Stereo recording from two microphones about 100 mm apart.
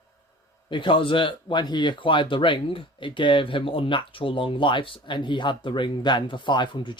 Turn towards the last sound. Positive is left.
turn(degrees=50)  # may be behind; listen again after turning